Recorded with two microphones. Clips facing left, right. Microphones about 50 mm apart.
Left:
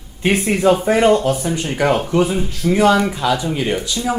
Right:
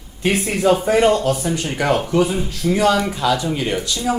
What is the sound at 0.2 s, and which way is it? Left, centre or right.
Speech, left.